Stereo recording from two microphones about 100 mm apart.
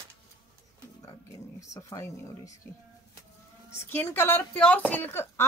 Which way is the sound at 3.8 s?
20° left (ahead or behind).